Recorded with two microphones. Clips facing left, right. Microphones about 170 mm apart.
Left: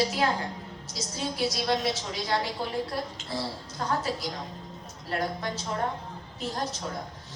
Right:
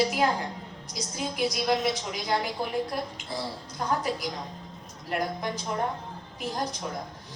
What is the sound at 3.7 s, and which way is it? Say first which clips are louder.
A woman's voice: right 1 dB; 15° right (ahead or behind).